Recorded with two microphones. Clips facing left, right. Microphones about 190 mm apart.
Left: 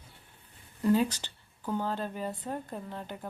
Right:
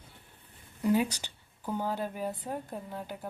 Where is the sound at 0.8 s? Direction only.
10° right (ahead or behind).